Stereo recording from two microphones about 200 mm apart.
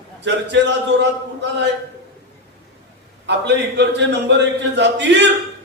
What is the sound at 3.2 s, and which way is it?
A man's voice, 60° right (ahead or behind).